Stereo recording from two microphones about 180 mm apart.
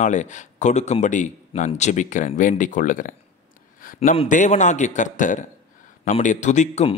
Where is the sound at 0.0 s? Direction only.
40° left (ahead or behind).